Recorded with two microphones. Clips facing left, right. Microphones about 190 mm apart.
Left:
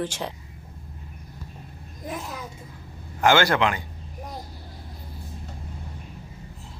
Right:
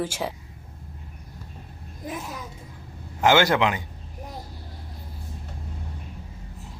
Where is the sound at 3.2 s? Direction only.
20° right (ahead or behind).